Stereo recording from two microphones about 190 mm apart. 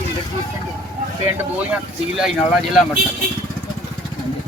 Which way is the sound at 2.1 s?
5° right (ahead or behind).